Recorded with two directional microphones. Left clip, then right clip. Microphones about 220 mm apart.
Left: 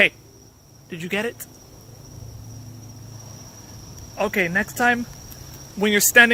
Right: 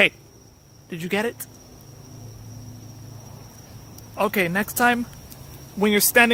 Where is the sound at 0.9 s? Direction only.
20° right (ahead or behind).